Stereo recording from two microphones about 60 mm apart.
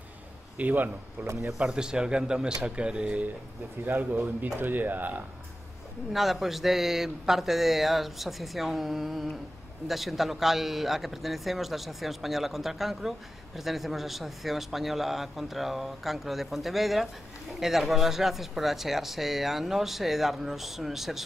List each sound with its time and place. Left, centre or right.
0.6 s a man's voice: right
1.2 s speech: right
1.5 s speech: centre
3.8 s speech: right
6.1 s speech: centre